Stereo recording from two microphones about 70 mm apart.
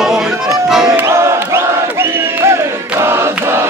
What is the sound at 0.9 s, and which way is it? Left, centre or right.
Battle cry, right.